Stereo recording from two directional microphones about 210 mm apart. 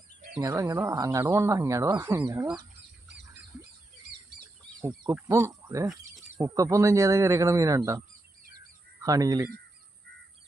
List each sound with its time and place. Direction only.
0.3 s speech: 15° right (ahead or behind)
4.8 s speech: 10° right (ahead or behind)
9.0 s speech: 15° right (ahead or behind)